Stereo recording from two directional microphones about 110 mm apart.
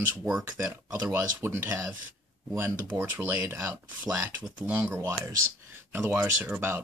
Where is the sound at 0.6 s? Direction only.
20° right (ahead or behind).